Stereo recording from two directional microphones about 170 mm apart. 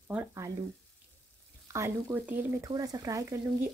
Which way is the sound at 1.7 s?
15° right (ahead or behind).